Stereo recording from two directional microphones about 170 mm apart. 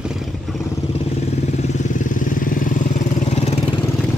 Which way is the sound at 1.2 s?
45° left (ahead or behind).